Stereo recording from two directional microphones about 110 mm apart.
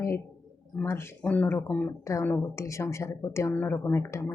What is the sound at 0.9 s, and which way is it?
Speech, 25° left (ahead or behind).